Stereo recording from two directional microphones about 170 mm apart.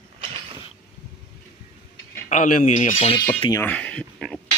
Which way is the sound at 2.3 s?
50° left (ahead or behind).